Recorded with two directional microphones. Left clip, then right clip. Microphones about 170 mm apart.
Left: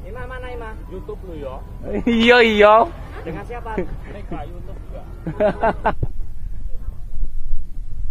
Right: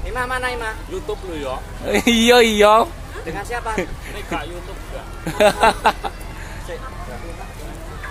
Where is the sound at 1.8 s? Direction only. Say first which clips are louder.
Right 1 dB; 5° left (ahead or behind).